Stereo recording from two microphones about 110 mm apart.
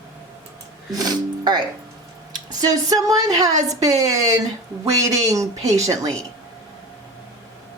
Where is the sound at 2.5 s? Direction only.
35° right (ahead or behind).